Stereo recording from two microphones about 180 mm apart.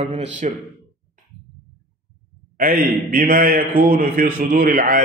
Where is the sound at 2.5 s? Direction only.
50° right (ahead or behind).